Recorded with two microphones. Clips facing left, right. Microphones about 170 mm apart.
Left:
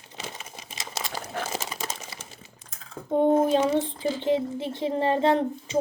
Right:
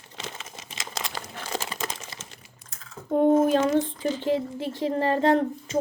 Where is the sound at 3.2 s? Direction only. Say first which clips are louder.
Right 1 dB; 20° left (ahead or behind).